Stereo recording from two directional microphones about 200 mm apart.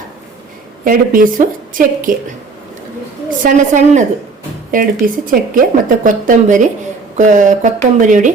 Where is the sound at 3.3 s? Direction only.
40° right (ahead or behind).